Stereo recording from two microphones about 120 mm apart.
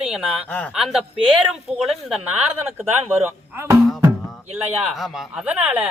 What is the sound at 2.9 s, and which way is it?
Speech, 20° right (ahead or behind).